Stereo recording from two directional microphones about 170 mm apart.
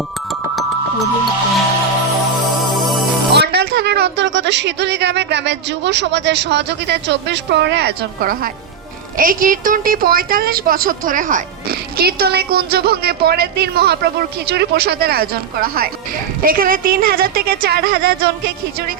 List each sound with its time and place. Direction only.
2.7 s music: centre (ahead or behind)
3.3 s a woman's voice: 75° right (ahead or behind)